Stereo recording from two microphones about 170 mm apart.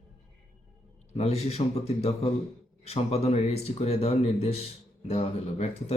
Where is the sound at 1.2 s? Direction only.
35° left (ahead or behind).